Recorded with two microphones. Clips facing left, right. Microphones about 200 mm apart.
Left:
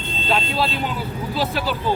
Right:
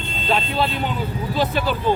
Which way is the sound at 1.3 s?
5° left (ahead or behind).